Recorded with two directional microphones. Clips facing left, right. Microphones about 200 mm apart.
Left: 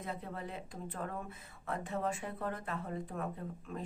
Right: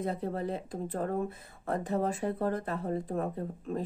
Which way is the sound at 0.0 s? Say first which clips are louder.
Right 9 dB; 40° right (ahead or behind).